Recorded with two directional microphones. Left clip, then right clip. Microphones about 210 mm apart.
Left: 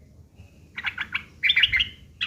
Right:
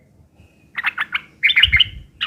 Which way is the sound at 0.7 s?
20° right (ahead or behind).